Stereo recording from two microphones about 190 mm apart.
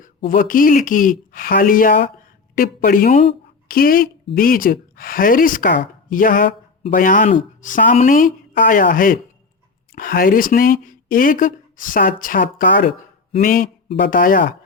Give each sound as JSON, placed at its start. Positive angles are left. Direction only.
{"t": 0.3, "sound": "speech", "side_deg": 45}